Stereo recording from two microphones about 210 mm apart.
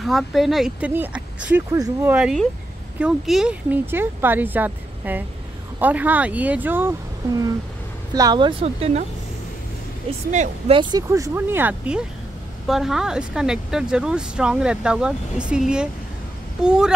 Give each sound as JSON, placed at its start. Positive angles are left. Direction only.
{"t": 0.0, "sound": "speech", "side_deg": 0}
{"t": 10.0, "sound": "speech", "side_deg": -30}